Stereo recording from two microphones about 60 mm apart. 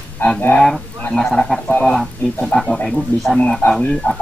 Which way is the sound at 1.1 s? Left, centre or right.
Centre.